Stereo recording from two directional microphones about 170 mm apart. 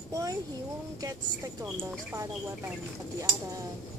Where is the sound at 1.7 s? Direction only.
5° right (ahead or behind).